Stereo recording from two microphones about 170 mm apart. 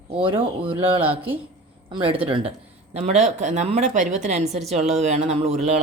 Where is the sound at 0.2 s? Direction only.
30° right (ahead or behind).